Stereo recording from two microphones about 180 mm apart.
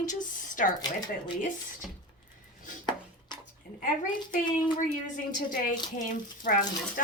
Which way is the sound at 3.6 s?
50° left (ahead or behind).